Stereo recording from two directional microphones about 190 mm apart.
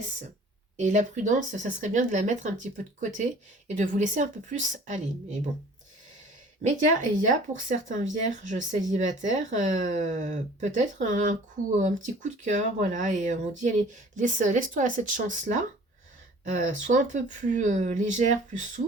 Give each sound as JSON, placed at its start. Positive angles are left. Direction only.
{"t": 0.8, "sound": "speech", "side_deg": -40}
{"t": 6.6, "sound": "speech", "side_deg": -40}